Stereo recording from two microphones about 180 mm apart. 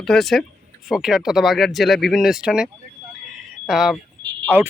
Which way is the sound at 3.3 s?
Centre (ahead or behind).